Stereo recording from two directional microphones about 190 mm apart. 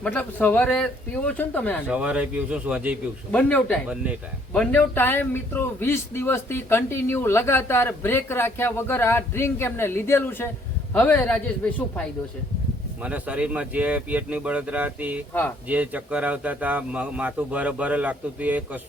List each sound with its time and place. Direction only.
0.0 s a man's voice: 10° left (ahead or behind)
1.9 s a man's voice: 5° right (ahead or behind)
3.3 s a man's voice: 5° left (ahead or behind)
3.8 s a man's voice: 5° right (ahead or behind)
4.5 s a man's voice: 5° left (ahead or behind)
13.0 s a man's voice: 5° right (ahead or behind)
15.3 s a man's voice: 10° left (ahead or behind)
15.7 s a man's voice: 10° right (ahead or behind)